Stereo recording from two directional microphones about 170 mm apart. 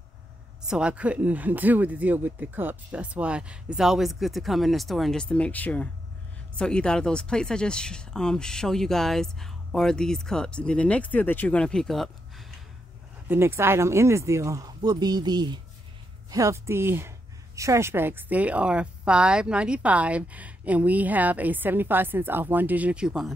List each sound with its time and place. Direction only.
0.7 s speech: 5° right (ahead or behind)
13.3 s a woman's voice: 15° right (ahead or behind)